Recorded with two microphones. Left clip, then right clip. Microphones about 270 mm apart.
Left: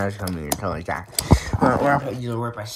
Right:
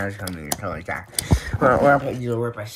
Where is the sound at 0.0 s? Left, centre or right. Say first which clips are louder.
Left 2 dB; left.